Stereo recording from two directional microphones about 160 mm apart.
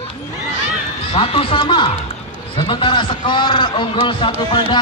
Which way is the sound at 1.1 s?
35° left (ahead or behind).